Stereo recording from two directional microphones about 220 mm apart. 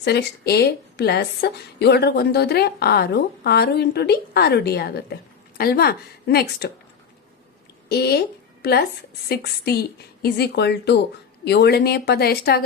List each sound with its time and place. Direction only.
0.0 s a woman's voice: 50° left (ahead or behind)
7.9 s a woman's voice: 45° left (ahead or behind)